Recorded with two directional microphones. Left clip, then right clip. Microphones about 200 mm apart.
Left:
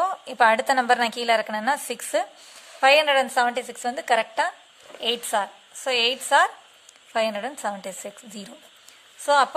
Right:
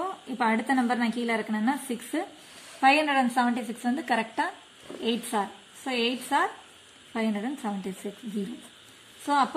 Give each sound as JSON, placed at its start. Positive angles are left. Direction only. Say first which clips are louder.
{"t": 0.0, "sound": "a woman's voice", "louder": "left 9 dB", "side_deg": 55}
{"t": 9.2, "sound": "a woman's voice", "louder": "left 6 dB", "side_deg": 45}